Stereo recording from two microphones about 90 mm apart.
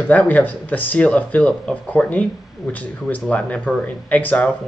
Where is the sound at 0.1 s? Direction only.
15° left (ahead or behind).